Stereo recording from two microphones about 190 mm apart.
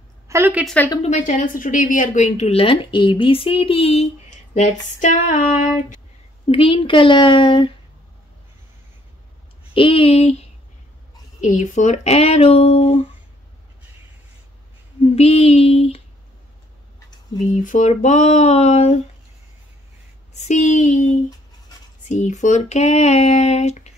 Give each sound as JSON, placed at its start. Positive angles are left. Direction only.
{"t": 0.3, "sound": "a woman's voice", "side_deg": -10}
{"t": 1.0, "sound": "a woman's voice", "side_deg": 40}
{"t": 6.5, "sound": "a woman's voice", "side_deg": 30}
{"t": 9.8, "sound": "a woman's voice", "side_deg": 30}
{"t": 11.4, "sound": "a woman's voice", "side_deg": 40}
{"t": 15.1, "sound": "a woman's voice", "side_deg": 30}
{"t": 17.6, "sound": "a woman's voice", "side_deg": 40}
{"t": 20.3, "sound": "a woman's voice", "side_deg": 40}